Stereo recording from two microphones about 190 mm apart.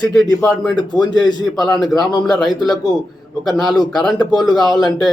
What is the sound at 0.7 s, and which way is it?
Speech, 20° left (ahead or behind).